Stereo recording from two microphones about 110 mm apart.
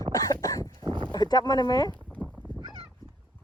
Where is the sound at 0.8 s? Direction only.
45° right (ahead or behind).